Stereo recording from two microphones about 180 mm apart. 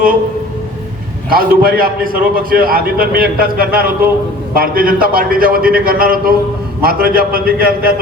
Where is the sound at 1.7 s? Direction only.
55° right (ahead or behind).